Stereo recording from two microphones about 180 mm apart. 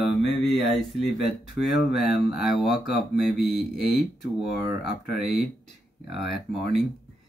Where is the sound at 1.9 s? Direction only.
Centre (ahead or behind).